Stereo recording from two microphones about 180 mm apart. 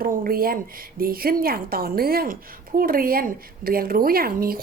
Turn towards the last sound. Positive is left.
turn(degrees=-55)  # may be behind; listen again after turning